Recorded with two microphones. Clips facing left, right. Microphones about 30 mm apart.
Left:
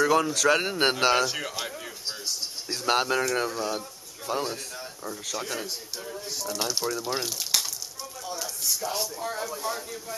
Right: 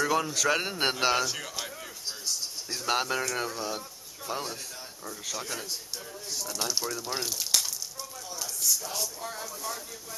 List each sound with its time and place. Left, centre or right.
0.0 s a man's voice: centre
2.8 s a man's voice: centre
8.6 s speech: left
9.5 s speech: left